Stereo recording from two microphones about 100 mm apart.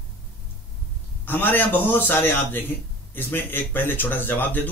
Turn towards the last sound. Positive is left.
turn(degrees=20)  # may be behind; listen again after turning